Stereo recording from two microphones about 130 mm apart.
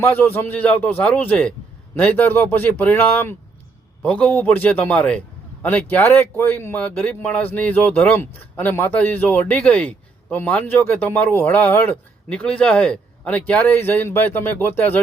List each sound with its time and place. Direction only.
0.0 s speech: 15° left (ahead or behind)